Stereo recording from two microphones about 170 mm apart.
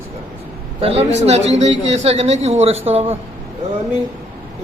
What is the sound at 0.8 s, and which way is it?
A man's voice, 35° right (ahead or behind).